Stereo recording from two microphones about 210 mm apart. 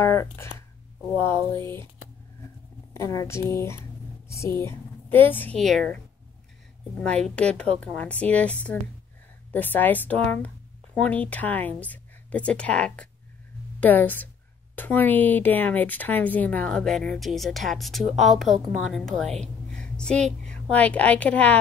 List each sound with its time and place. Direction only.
0.0 s speech: 15° left (ahead or behind)
2.9 s a woman's voice: 15° left (ahead or behind)
7.0 s speech: 5° left (ahead or behind)